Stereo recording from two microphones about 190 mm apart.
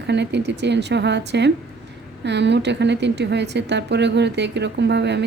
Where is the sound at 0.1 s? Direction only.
65° right (ahead or behind).